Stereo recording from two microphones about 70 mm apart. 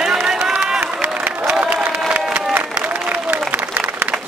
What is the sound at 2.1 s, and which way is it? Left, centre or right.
Crowd, right.